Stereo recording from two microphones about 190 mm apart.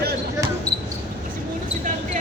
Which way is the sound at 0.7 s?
5° left (ahead or behind).